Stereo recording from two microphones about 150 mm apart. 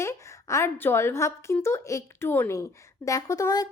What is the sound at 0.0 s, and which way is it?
A woman's voice, 20° left (ahead or behind).